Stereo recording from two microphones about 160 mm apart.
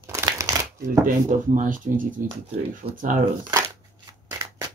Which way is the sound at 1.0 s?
55° right (ahead or behind).